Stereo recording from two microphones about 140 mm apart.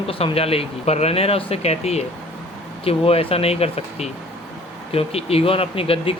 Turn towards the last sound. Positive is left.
turn(degrees=40)  # may be behind; listen again after turning